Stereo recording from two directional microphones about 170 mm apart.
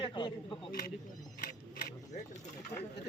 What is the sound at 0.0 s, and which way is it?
Speech, 25° left (ahead or behind).